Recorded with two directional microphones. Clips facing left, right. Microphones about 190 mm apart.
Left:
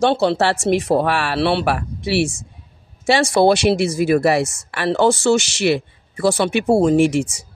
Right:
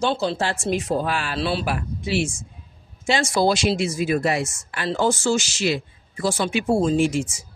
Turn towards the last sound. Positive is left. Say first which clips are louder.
# left 5 dB
turn(degrees=70)  # may be behind; listen again after turning